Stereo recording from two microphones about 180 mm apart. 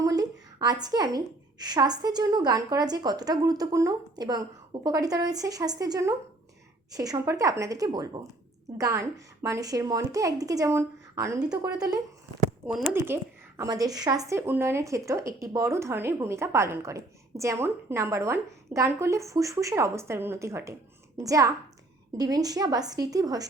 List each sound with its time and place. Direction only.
0.0 s a woman's voice: 20° right (ahead or behind)
12.6 s speech: 5° right (ahead or behind)
13.6 s a woman's voice: 20° right (ahead or behind)